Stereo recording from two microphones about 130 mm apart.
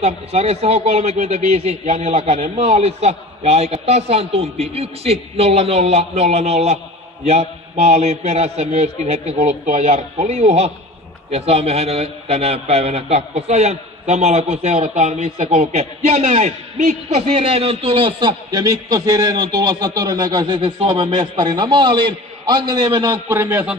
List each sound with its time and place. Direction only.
0.0 s a man's voice: 55° right (ahead or behind); by 23.1 s 35° right (ahead or behind)
23.2 s speech: 20° right (ahead or behind)